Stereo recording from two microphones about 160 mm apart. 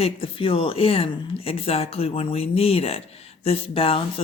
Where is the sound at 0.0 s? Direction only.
35° left (ahead or behind).